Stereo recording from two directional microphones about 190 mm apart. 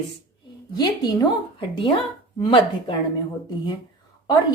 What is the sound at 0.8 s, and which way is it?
A woman's voice, 20° left (ahead or behind).